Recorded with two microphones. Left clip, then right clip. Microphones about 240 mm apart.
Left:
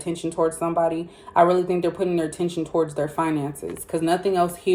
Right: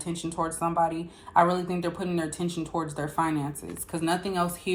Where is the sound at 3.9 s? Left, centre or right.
Centre.